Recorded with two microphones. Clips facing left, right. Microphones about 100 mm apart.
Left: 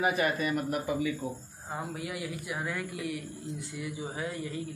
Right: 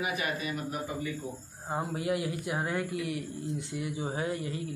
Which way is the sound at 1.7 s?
25° right (ahead or behind).